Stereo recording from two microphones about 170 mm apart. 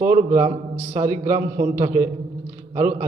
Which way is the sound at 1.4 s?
65° right (ahead or behind).